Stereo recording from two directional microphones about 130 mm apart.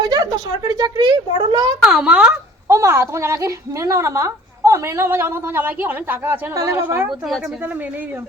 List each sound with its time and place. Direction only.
0.0 s speech: 30° right (ahead or behind)
1.8 s speech: 5° right (ahead or behind)
2.6 s a woman's voice: 20° right (ahead or behind)